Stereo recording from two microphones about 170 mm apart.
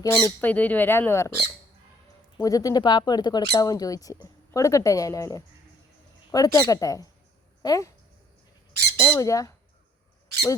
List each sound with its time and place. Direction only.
0.0 s speech: 15° left (ahead or behind)
2.4 s speech: 20° left (ahead or behind)
9.0 s speech: 15° left (ahead or behind)